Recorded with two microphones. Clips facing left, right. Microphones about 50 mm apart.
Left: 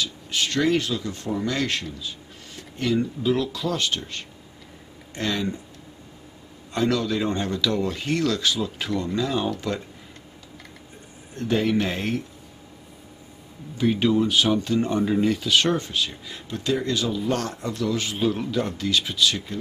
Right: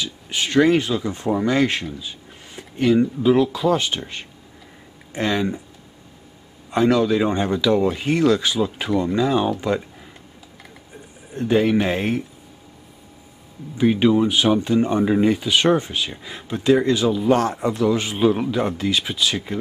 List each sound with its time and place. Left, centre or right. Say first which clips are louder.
0.0 s speech: right 1 dB; centre
6.7 s speech: right 6 dB; centre
11.3 s speech: right 5 dB; centre
13.7 s speech: right 4 dB; centre